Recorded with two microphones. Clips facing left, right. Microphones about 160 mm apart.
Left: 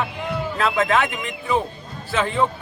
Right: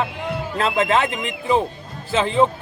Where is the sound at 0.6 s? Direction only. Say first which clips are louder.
Right 1 dB; 30° right (ahead or behind).